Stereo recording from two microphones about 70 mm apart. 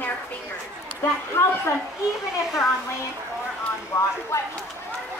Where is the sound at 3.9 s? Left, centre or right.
Left.